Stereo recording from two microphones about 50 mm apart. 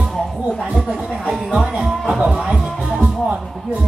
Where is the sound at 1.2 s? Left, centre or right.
Centre.